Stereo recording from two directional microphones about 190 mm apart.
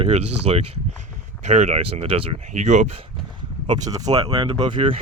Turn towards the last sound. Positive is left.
turn(degrees=-25)  # may be behind; listen again after turning